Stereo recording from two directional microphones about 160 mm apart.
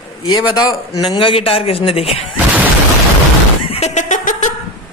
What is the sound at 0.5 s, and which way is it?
A man's voice, 25° left (ahead or behind).